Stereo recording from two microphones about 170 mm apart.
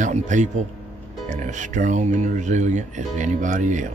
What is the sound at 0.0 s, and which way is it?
Speech, 45° right (ahead or behind).